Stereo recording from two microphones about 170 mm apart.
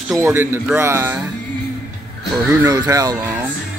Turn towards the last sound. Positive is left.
turn(degrees=-20)  # may be behind; listen again after turning